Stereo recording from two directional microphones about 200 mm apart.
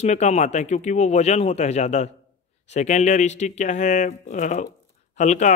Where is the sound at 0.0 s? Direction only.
35° left (ahead or behind).